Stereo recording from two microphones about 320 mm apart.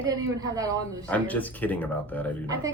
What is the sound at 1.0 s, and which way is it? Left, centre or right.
Speech, centre.